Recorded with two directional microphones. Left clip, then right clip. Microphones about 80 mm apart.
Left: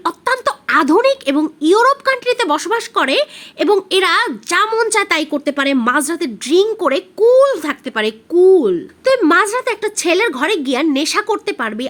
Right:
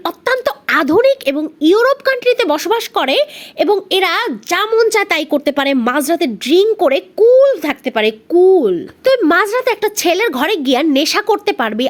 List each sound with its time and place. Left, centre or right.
0.0 s a sound: right
0.7 s a woman's voice: right
1.6 s speech: right
3.8 s a child's voice: centre
4.9 s a woman's voice: right
6.0 s a child's voice: right
8.6 s a woman's voice: right